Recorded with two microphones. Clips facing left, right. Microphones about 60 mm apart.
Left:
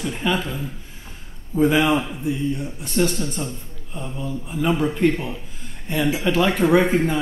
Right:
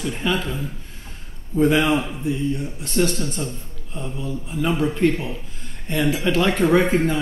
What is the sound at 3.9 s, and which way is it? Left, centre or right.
Speech, centre.